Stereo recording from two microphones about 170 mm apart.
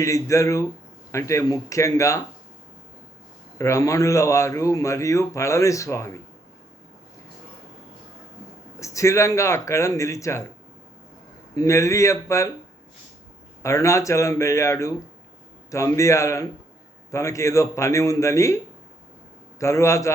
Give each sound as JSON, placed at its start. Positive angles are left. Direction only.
{"t": 0.0, "sound": "speech", "side_deg": 20}
{"t": 3.6, "sound": "speech", "side_deg": 20}
{"t": 8.8, "sound": "speech", "side_deg": 20}
{"t": 11.5, "sound": "speech", "side_deg": 20}
{"t": 13.6, "sound": "speech", "side_deg": 15}